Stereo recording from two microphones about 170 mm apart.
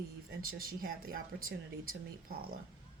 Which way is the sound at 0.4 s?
60° right (ahead or behind).